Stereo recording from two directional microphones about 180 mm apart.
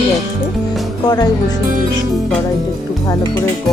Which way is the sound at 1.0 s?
20° left (ahead or behind).